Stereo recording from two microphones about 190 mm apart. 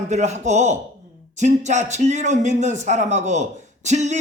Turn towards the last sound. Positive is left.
turn(degrees=-40)  # may be behind; listen again after turning